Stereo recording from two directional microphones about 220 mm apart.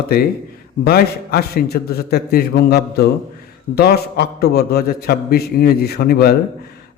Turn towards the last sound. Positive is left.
turn(degrees=45)  # may be behind; listen again after turning